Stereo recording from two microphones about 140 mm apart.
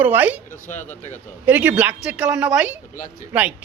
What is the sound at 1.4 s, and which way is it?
A woman's voice, 10° right (ahead or behind).